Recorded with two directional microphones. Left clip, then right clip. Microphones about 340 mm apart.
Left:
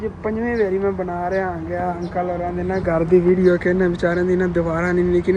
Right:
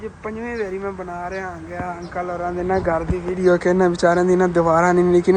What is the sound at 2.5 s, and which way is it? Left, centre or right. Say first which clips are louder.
Speech: right 2 dB; right.